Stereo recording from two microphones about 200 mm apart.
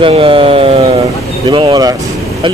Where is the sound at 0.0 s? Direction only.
25° right (ahead or behind).